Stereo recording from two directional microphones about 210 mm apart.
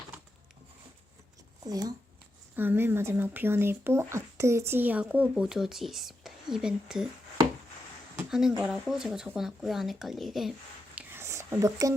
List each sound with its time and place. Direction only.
1.6 s speech: 20° right (ahead or behind); by 7.1 s 5° right (ahead or behind)
8.3 s speech: 5° right (ahead or behind)
10.9 s whispering: 10° right (ahead or behind)